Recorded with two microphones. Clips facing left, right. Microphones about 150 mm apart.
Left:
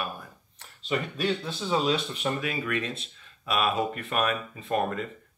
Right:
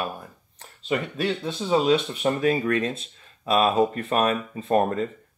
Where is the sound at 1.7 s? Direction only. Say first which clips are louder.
Right 6 dB; 40° right (ahead or behind).